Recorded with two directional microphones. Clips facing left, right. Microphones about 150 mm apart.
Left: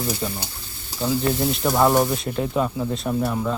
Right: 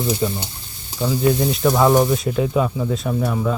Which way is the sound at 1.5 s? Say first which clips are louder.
Right 1 dB; centre (ahead or behind).